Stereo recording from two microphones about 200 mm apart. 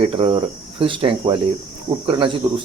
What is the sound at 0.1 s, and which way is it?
Speech, 25° right (ahead or behind).